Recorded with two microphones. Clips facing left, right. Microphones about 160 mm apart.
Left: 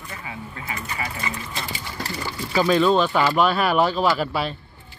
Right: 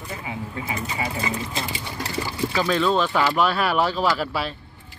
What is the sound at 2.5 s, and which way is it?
Speech, 5° left (ahead or behind).